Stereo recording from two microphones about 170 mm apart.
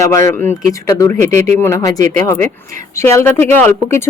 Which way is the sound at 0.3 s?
10° left (ahead or behind).